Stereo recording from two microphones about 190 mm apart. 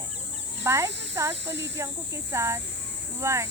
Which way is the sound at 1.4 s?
65° right (ahead or behind).